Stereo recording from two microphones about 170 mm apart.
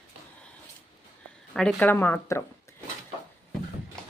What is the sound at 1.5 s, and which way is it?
Speech, centre (ahead or behind).